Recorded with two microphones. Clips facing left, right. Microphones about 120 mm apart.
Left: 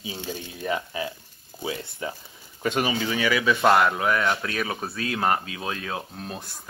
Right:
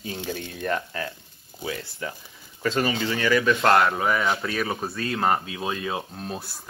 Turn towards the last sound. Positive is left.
turn(degrees=-5)  # may be behind; listen again after turning